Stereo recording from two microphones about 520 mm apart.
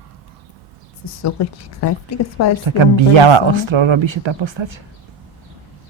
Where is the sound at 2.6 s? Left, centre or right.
Right.